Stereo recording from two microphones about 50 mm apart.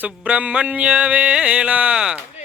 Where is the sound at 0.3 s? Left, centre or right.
Right.